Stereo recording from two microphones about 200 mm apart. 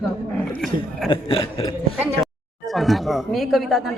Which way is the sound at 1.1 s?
25° left (ahead or behind).